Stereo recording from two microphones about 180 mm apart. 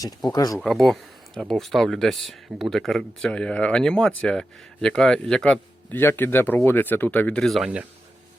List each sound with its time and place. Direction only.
0.0 s speech: 20° left (ahead or behind)
0.6 s speech: centre (ahead or behind)